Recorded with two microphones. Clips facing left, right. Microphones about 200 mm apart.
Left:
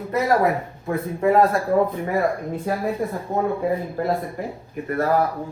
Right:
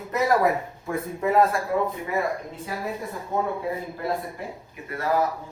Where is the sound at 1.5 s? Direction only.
45° left (ahead or behind).